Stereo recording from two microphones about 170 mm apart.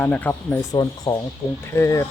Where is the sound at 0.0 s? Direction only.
10° left (ahead or behind).